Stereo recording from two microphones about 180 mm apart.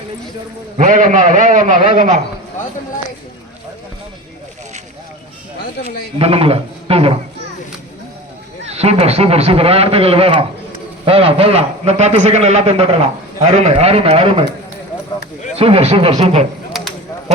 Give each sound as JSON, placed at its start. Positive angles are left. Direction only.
{"t": 0.8, "sound": "a man's voice", "side_deg": -45}
{"t": 6.1, "sound": "a man's voice", "side_deg": -30}
{"t": 8.6, "sound": "a man's voice", "side_deg": -35}
{"t": 15.5, "sound": "a man's voice", "side_deg": -35}
{"t": 16.7, "sound": "a sound", "side_deg": 0}